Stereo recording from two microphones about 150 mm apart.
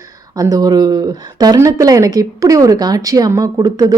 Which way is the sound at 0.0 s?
20° right (ahead or behind).